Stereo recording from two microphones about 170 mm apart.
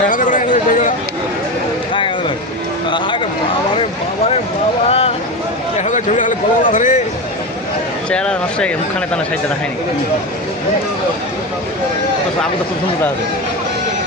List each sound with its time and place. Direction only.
0.1 s speech: 50° left (ahead or behind)
4.9 s a sound: 35° left (ahead or behind)
8.1 s speech: 5° left (ahead or behind)